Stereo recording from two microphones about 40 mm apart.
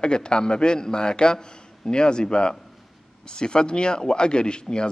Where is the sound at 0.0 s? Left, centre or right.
Left.